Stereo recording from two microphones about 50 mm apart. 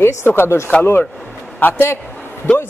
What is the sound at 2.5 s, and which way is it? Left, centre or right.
Speech, centre.